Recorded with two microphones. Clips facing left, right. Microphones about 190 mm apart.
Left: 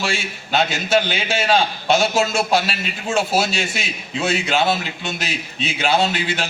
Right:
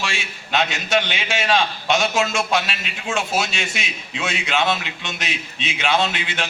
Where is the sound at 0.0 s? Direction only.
35° left (ahead or behind).